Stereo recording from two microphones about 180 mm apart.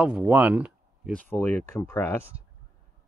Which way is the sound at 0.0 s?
5° right (ahead or behind).